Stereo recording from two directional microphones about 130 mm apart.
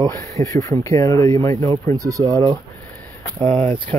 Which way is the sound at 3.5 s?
45° right (ahead or behind).